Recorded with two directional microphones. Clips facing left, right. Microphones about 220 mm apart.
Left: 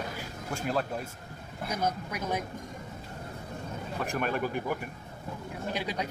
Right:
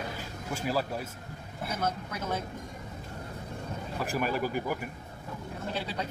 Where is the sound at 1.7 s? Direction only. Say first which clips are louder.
Left 2 dB; 15° left (ahead or behind).